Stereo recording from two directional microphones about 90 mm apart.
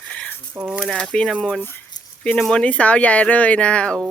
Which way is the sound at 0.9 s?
10° left (ahead or behind).